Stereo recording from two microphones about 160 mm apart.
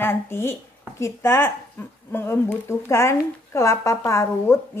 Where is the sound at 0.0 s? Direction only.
15° left (ahead or behind).